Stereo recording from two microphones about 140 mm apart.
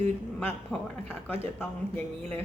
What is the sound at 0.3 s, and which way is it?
A man's voice, 10° left (ahead or behind).